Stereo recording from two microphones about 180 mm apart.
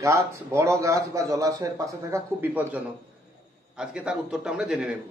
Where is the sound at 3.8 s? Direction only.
5° right (ahead or behind).